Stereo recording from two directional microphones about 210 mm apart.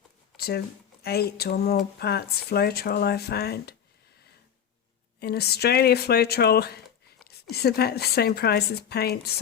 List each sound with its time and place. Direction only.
0.3 s a sound: 50° left (ahead or behind)
1.0 s speech: 50° left (ahead or behind)
5.2 s speech: 50° left (ahead or behind)